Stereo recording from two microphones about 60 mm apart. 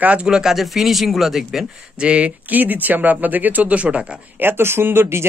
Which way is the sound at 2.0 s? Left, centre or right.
Right.